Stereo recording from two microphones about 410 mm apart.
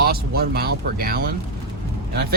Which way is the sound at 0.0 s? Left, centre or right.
Right.